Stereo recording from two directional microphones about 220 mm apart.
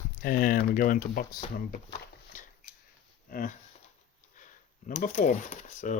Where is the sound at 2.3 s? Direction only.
35° left (ahead or behind).